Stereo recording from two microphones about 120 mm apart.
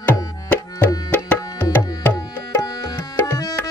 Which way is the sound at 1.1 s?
15° left (ahead or behind).